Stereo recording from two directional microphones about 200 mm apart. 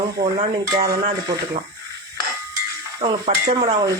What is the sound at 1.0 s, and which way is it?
Speech, 30° right (ahead or behind).